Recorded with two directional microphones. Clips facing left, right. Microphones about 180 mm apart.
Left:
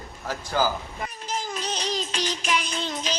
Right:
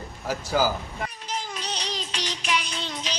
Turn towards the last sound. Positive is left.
turn(degrees=45)  # may be behind; listen again after turning